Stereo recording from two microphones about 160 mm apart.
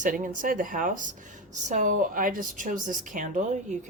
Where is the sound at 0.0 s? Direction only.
55° right (ahead or behind).